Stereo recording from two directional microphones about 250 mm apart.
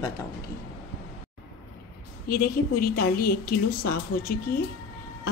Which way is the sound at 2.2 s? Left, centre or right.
Left.